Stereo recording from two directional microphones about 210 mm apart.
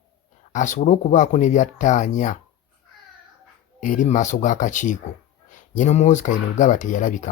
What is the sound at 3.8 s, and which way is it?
Speech, 40° left (ahead or behind).